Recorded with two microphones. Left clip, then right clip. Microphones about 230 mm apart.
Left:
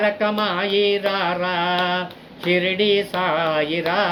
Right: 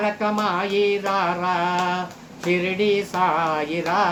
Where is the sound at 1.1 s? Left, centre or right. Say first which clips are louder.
Even; centre.